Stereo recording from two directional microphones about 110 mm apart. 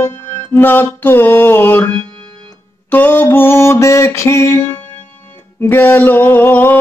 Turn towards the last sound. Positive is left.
turn(degrees=15)  # may be behind; listen again after turning